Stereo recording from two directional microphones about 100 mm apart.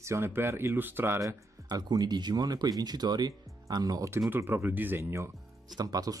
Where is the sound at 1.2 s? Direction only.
35° right (ahead or behind).